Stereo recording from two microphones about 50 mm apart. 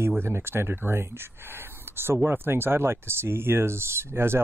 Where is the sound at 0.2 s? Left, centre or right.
Right.